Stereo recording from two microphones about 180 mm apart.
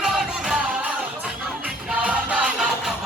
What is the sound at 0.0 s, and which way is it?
Music, 5° right (ahead or behind).